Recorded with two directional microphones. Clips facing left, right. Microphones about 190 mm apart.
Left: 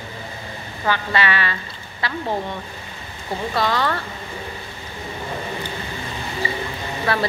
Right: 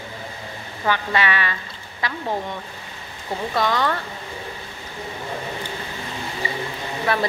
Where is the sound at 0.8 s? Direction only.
15° right (ahead or behind).